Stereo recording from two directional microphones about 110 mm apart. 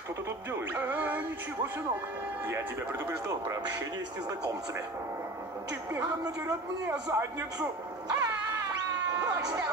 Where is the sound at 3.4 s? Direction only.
35° right (ahead or behind).